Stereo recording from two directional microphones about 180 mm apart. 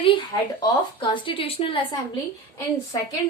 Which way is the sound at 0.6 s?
25° left (ahead or behind).